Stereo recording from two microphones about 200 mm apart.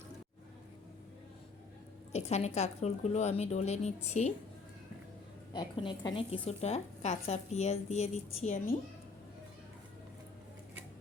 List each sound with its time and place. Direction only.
2.1 s a woman's voice: 30° left (ahead or behind)
5.5 s a woman's voice: 25° left (ahead or behind)